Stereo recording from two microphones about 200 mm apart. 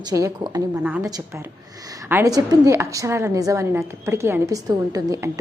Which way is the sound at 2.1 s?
15° right (ahead or behind).